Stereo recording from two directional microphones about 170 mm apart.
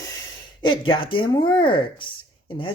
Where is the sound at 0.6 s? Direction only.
30° left (ahead or behind).